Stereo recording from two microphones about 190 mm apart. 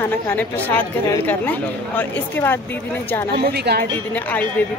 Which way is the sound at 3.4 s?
60° right (ahead or behind).